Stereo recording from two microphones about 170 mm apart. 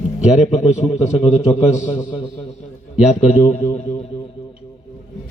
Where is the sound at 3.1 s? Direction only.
40° left (ahead or behind).